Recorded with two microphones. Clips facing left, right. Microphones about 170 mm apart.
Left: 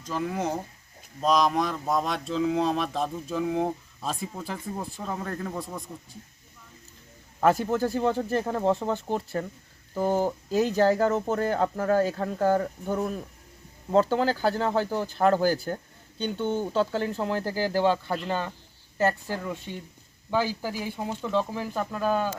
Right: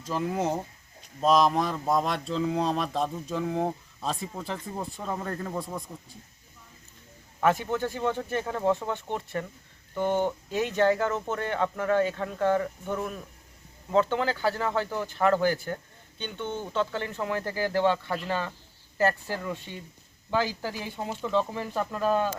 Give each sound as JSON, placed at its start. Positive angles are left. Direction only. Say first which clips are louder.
{"t": 0.0, "sound": "speech", "louder": "right 1 dB", "side_deg": -5}
{"t": 7.7, "sound": "speech", "louder": "left 3 dB", "side_deg": 35}
{"t": 20.6, "sound": "speech", "louder": "left 2 dB", "side_deg": 10}
{"t": 21.1, "sound": "speech", "louder": "left 1 dB", "side_deg": -5}
{"t": 21.3, "sound": "speech", "louder": "even", "side_deg": 5}